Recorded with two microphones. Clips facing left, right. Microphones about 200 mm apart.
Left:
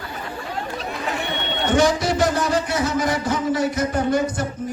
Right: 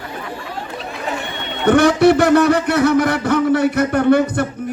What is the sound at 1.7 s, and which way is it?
A man's voice, 60° right (ahead or behind).